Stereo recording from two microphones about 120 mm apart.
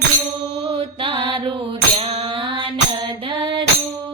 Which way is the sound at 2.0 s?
50° right (ahead or behind).